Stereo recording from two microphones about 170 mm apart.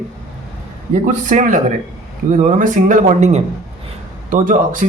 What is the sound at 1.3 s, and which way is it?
Speech, 50° right (ahead or behind).